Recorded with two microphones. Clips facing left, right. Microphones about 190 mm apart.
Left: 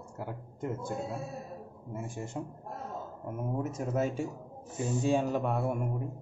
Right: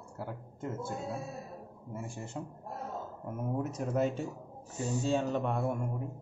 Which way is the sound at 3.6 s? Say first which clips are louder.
Even; 5° left (ahead or behind).